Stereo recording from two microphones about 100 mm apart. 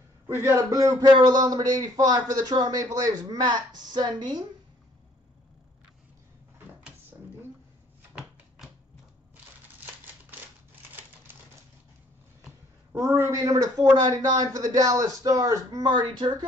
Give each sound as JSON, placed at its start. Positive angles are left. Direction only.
{"t": 0.3, "sound": "a man's voice", "side_deg": -25}
{"t": 8.1, "sound": "typewriter", "side_deg": -5}
{"t": 12.9, "sound": "a woman's voice", "side_deg": -30}